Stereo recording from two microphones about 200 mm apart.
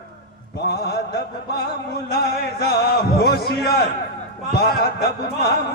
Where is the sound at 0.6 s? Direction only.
55° left (ahead or behind).